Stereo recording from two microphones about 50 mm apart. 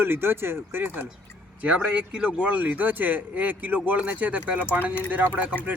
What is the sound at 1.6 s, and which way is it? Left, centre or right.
Speech, right.